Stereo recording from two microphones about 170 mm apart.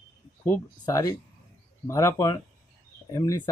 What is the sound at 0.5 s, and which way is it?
Speech, 20° left (ahead or behind).